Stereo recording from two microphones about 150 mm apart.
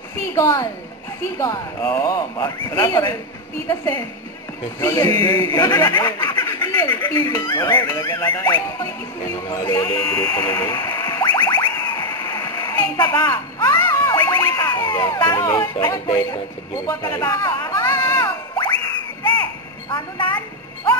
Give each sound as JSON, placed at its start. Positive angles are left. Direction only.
{"t": 0.3, "sound": "a woman's voice", "side_deg": 20}
{"t": 4.7, "sound": "a man's voice", "side_deg": 20}
{"t": 6.7, "sound": "a sound", "side_deg": 15}
{"t": 7.0, "sound": "a man's voice", "side_deg": 30}
{"t": 10.7, "sound": "music", "side_deg": 30}
{"t": 15.2, "sound": "speech", "side_deg": 25}
{"t": 19.9, "sound": "a sound", "side_deg": 30}